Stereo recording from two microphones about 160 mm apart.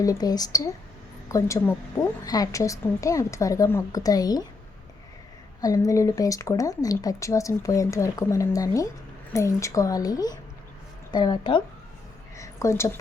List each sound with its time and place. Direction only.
0.0 s speech: 25° left (ahead or behind)
5.5 s a woman's voice: 20° left (ahead or behind)